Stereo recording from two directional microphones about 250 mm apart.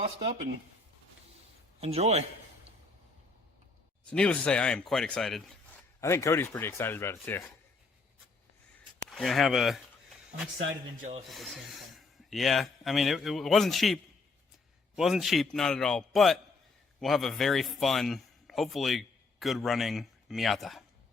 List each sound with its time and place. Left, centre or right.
1.8 s a man's voice: right
4.1 s speech: centre
9.0 s a sound: centre
11.3 s a man's voice: centre